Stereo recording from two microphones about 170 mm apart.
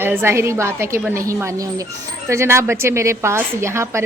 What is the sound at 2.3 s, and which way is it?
Speech, 15° right (ahead or behind).